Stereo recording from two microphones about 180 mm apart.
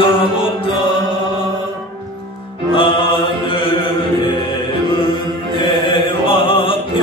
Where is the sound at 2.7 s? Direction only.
30° left (ahead or behind).